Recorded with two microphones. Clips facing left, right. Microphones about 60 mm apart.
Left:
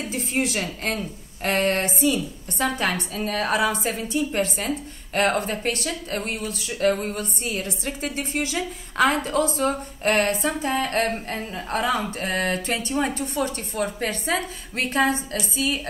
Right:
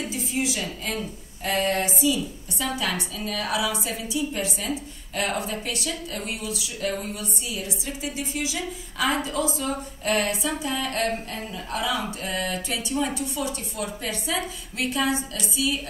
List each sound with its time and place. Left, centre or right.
0.1 s a woman's voice: left